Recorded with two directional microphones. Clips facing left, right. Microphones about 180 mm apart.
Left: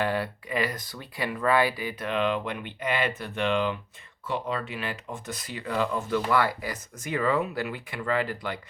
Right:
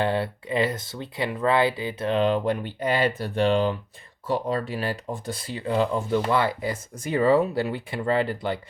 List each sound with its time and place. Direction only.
0.0 s speech: 25° right (ahead or behind)